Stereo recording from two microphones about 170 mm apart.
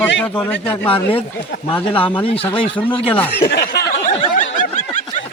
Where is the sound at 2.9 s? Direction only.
30° left (ahead or behind).